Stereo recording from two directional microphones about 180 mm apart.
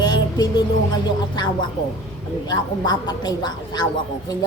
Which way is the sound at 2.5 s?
25° left (ahead or behind).